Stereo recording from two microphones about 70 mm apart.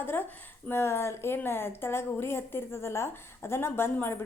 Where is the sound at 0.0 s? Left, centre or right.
Left.